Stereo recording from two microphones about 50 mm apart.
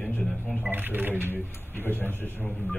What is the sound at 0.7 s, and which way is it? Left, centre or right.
Speech, right.